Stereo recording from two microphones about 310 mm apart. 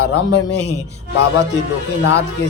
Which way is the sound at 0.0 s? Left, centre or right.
Left.